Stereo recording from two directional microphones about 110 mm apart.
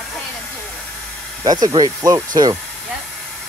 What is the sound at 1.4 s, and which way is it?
Speech, 35° right (ahead or behind).